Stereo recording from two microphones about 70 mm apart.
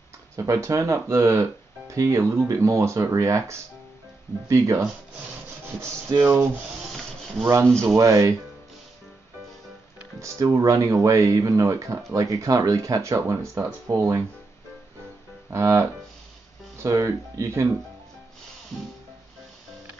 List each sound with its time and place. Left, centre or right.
0.4 s speech: right
7.8 s speech: right
10.5 s speech: right
15.5 s speech: right